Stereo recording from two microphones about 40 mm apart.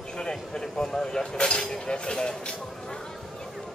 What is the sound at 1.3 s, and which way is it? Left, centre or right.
Speech, left.